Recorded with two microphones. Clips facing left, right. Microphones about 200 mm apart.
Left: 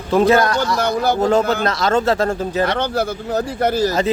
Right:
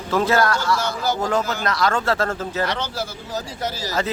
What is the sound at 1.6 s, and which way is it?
Speech, 25° left (ahead or behind).